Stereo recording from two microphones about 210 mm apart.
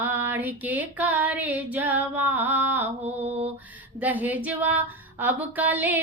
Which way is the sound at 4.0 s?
10° right (ahead or behind).